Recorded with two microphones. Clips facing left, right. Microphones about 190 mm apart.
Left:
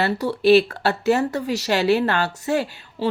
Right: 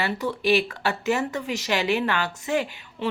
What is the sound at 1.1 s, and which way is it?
Speech, 40° left (ahead or behind).